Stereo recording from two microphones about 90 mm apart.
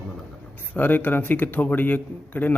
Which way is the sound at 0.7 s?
20° left (ahead or behind).